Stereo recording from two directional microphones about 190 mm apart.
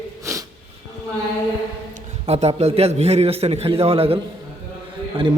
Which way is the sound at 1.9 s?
35° right (ahead or behind).